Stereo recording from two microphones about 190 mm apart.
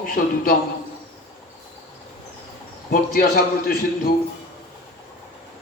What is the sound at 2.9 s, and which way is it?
Speech, 50° left (ahead or behind).